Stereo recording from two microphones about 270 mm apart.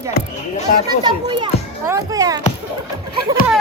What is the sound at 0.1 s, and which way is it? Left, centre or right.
Speech, left.